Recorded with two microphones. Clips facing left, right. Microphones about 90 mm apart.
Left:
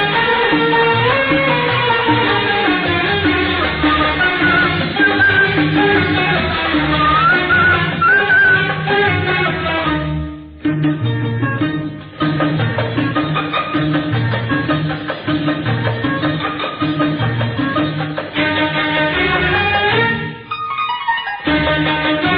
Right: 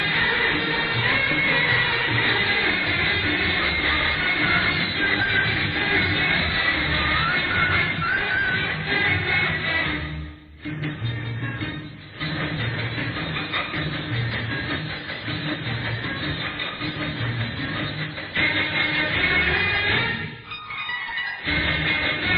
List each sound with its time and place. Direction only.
0.0 s music: 60° left (ahead or behind)
6.8 s music: 50° left (ahead or behind)
7.1 s music: 65° left (ahead or behind)
9.4 s music: 65° left (ahead or behind)
10.7 s music: 40° left (ahead or behind)
12.2 s music: 40° left (ahead or behind)
13.7 s music: 45° left (ahead or behind)
18.4 s music: 45° left (ahead or behind)
21.1 s music: 50° left (ahead or behind)